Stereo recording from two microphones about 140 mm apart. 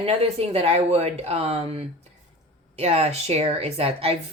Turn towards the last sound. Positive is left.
turn(degrees=-45)  # may be behind; listen again after turning